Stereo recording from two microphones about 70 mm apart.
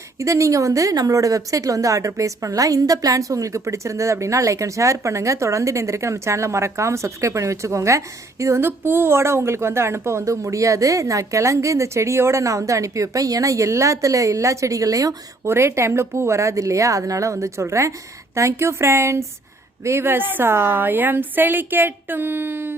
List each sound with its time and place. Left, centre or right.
0.2 s a woman's voice: right
15.4 s a woman's voice: right